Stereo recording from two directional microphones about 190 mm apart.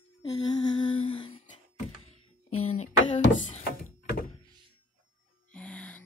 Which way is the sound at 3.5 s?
45° left (ahead or behind).